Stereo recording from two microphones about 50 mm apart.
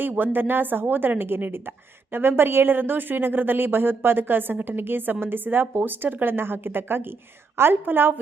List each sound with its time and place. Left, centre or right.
0.0 s a woman's voice: right